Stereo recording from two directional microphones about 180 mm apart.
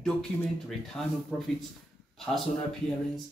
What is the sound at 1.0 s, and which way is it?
Speech, centre (ahead or behind).